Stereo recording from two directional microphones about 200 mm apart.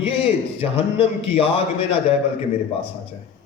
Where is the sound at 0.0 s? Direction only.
30° left (ahead or behind).